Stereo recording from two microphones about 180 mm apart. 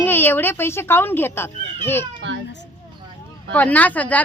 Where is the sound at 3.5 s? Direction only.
10° left (ahead or behind).